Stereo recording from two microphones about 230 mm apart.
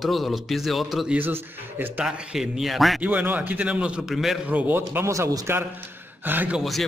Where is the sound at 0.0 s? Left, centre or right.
Centre.